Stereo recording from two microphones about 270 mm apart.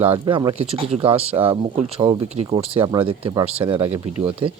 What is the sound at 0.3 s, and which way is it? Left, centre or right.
Speech, centre.